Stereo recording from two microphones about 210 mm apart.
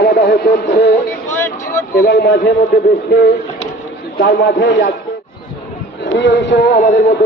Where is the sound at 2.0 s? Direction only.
50° left (ahead or behind).